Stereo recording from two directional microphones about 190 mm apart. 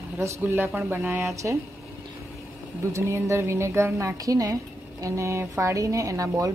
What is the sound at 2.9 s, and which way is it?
A woman's voice, 15° right (ahead or behind).